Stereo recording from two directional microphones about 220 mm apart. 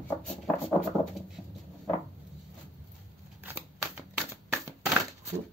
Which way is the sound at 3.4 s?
10° right (ahead or behind).